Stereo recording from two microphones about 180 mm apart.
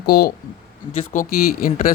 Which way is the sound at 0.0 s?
60° left (ahead or behind).